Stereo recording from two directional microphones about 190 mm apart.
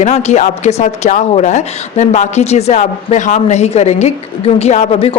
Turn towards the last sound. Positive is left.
turn(degrees=35)  # may be behind; listen again after turning